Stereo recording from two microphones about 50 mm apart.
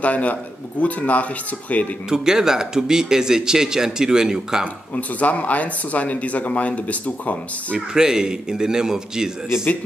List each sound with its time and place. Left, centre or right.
0.0 s speech: left
2.0 s speech: centre
4.9 s speech: left
7.9 s speech: centre